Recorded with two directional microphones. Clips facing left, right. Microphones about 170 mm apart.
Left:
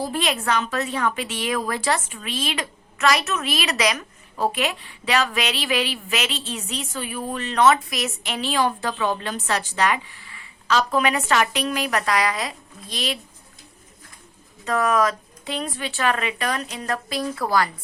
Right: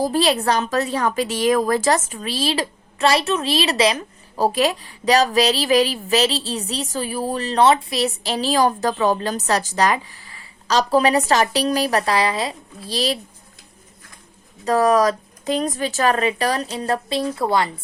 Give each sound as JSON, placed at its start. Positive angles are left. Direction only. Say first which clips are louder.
{"t": 0.0, "sound": "a woman's voice", "louder": "right 6 dB", "side_deg": -35}
{"t": 14.6, "sound": "a woman's voice", "louder": "right 5 dB", "side_deg": -35}